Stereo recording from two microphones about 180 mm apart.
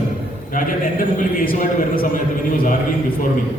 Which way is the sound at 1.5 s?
50° left (ahead or behind).